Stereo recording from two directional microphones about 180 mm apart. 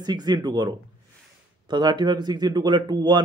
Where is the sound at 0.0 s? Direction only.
20° right (ahead or behind).